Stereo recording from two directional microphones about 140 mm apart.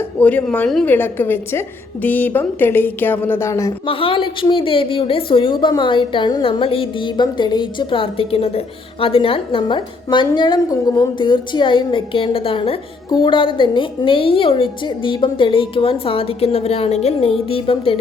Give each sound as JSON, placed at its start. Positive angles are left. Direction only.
{"t": 0.2, "sound": "a woman's voice", "side_deg": 10}
{"t": 3.8, "sound": "a woman's voice", "side_deg": 40}
{"t": 17.5, "sound": "music", "side_deg": 40}